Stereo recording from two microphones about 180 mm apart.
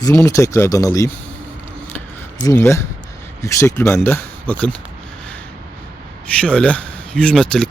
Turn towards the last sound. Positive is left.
turn(degrees=5)  # may be behind; listen again after turning